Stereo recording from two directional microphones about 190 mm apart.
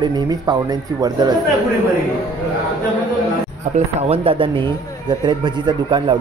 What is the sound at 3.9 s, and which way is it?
A man's voice, 30° right (ahead or behind).